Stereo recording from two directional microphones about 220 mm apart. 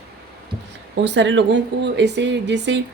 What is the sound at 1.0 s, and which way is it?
Speech, 55° right (ahead or behind).